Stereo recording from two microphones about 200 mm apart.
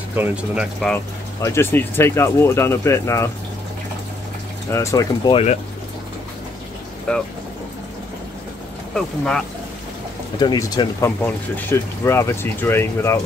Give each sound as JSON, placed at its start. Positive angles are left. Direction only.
{"t": 0.1, "sound": "speech", "side_deg": -10}
{"t": 1.4, "sound": "speech", "side_deg": 10}
{"t": 4.6, "sound": "speech", "side_deg": 15}
{"t": 7.1, "sound": "speech", "side_deg": 5}
{"t": 8.9, "sound": "speech", "side_deg": 5}
{"t": 10.4, "sound": "speech", "side_deg": 20}